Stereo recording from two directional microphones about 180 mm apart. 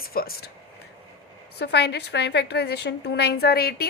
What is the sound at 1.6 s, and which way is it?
A woman's voice, 65° left (ahead or behind).